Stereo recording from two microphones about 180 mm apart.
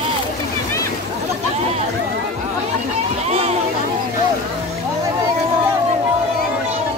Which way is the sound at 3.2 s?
35° right (ahead or behind).